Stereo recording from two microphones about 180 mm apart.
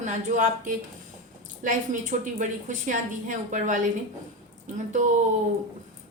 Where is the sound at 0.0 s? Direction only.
45° right (ahead or behind).